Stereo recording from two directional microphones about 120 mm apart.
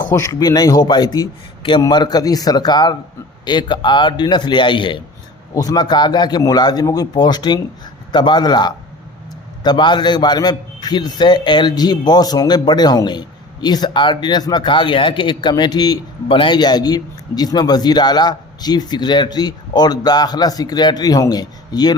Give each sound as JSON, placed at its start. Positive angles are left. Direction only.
{"t": 0.2, "sound": "a man's voice", "side_deg": 30}